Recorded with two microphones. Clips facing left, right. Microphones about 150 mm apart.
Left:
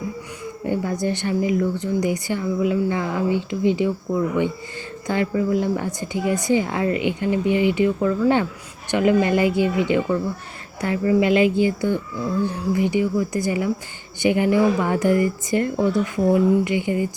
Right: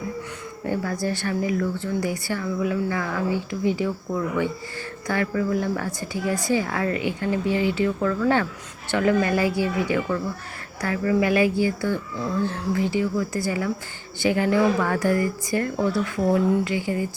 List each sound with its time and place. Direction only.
0.6 s speech: 15° left (ahead or behind)
5.0 s speech: 20° left (ahead or behind)